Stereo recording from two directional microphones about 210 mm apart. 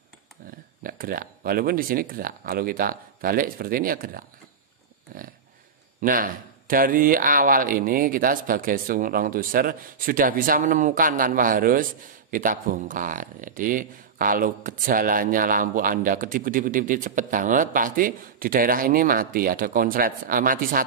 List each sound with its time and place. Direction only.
0.8 s speech: 45° right (ahead or behind)
5.1 s dog: 40° right (ahead or behind)
5.9 s speech: 40° right (ahead or behind)